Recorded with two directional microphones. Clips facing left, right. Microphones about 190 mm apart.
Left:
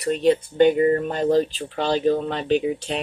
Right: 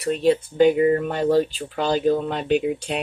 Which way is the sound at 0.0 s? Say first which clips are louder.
Even; centre (ahead or behind).